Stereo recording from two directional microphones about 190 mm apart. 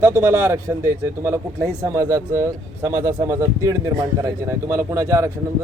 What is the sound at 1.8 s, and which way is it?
Speech, 15° right (ahead or behind).